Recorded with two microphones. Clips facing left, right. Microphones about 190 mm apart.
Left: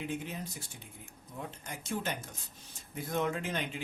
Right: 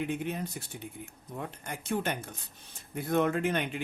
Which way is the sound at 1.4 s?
60° right (ahead or behind).